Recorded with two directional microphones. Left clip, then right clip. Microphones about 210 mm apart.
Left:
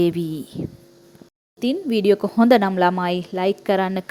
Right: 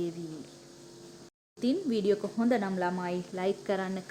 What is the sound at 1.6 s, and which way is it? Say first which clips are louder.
Speech: left 9 dB; 35° left (ahead or behind).